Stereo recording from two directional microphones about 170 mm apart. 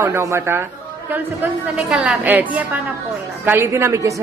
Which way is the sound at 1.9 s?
5° right (ahead or behind).